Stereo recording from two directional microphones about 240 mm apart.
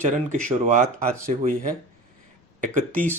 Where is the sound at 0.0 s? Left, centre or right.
Right.